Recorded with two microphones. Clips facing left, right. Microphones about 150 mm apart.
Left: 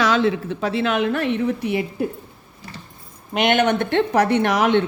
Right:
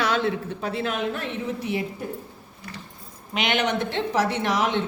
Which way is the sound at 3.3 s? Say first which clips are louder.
Left 6 dB; 50° left (ahead or behind).